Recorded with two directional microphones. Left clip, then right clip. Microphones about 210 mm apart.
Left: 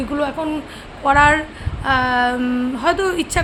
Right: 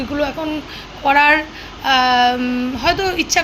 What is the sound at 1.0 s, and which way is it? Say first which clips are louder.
A woman's voice: right 1 dB; 15° left (ahead or behind).